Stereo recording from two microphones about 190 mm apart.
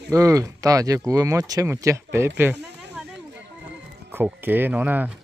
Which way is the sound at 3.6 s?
10° right (ahead or behind).